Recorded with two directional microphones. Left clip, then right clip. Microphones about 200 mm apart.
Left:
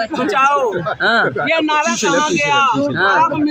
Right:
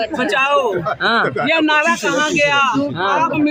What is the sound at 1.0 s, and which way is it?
Speech, 5° left (ahead or behind).